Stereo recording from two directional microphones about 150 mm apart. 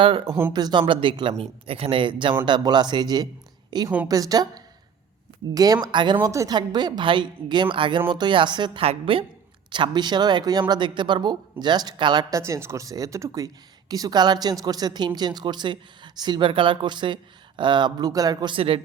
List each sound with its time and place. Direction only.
0.5 s a woman's voice: 30° right (ahead or behind)
12.4 s speech: 20° right (ahead or behind); by 18.8 s 35° right (ahead or behind)